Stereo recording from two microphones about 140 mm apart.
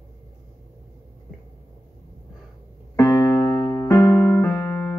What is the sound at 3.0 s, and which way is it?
Keyboard, 25° left (ahead or behind).